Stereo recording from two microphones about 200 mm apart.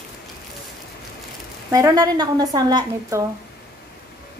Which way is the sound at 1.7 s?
15° right (ahead or behind).